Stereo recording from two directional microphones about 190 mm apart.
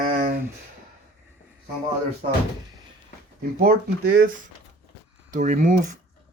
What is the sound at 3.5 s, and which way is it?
Speech, 55° right (ahead or behind).